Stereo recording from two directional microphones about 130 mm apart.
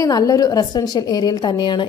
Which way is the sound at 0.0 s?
25° left (ahead or behind).